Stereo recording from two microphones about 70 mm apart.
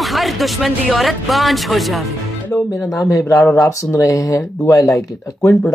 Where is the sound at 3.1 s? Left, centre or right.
Left.